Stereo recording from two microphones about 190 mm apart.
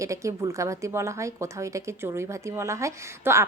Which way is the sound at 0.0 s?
15° right (ahead or behind).